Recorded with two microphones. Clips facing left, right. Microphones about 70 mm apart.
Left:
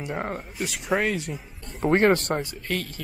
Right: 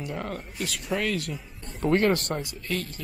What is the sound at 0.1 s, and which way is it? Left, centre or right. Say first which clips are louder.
Speech: left 5 dB; left.